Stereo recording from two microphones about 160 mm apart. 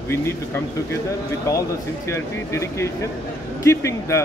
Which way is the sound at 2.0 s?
15° left (ahead or behind).